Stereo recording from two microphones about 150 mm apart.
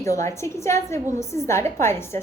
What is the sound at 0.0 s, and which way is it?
A woman's voice, 20° left (ahead or behind).